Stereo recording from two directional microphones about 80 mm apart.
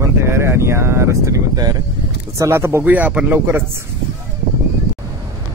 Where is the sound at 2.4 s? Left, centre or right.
Right.